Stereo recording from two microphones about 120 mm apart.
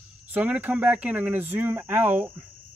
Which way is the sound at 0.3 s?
15° right (ahead or behind).